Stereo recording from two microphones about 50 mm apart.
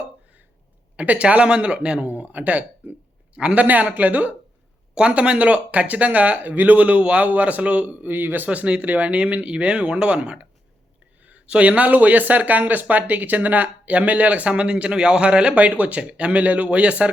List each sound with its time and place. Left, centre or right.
0.9 s speech: right
2.0 s a man's voice: right
4.9 s speech: right
8.1 s a man's voice: right
8.4 s speech: right